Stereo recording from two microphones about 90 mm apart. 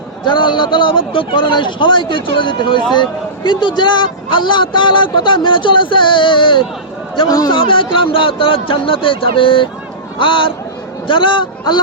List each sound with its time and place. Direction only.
0.3 s speech: 60° left (ahead or behind)
7.3 s a man's voice: 45° left (ahead or behind)
7.5 s speech: 70° left (ahead or behind)